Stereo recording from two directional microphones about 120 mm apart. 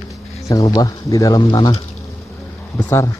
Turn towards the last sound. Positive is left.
turn(degrees=25)  # may be behind; listen again after turning